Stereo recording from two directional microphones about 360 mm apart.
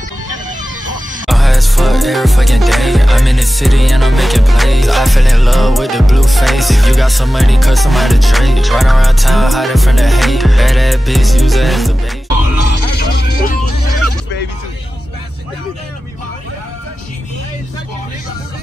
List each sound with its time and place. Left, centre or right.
1.2 s music: centre
12.8 s vehicle: left